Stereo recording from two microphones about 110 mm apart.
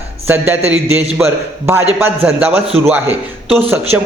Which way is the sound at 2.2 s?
10° right (ahead or behind).